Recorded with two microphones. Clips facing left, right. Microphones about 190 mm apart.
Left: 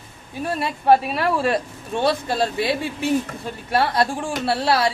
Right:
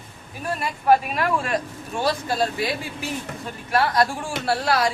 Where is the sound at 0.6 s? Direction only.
30° left (ahead or behind).